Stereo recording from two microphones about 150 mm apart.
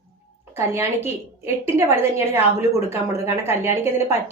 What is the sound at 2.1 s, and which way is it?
Speech, 15° right (ahead or behind).